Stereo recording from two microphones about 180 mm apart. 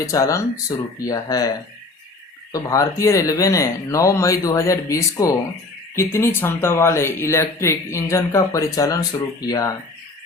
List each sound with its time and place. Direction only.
0.0 s speech: 15° left (ahead or behind)